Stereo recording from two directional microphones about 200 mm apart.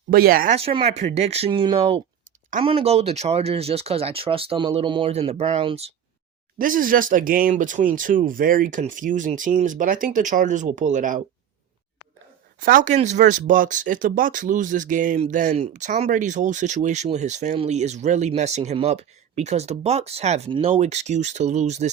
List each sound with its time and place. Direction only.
0.1 s speech: 45° right (ahead or behind)
0.5 s speech: 25° right (ahead or behind)
6.6 s speech: 45° right (ahead or behind)
12.5 s speech: 40° right (ahead or behind)